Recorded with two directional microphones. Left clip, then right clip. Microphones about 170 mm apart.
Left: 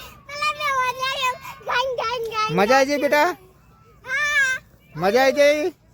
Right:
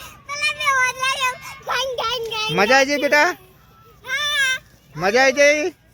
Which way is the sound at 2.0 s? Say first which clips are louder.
Even; 5° left (ahead or behind).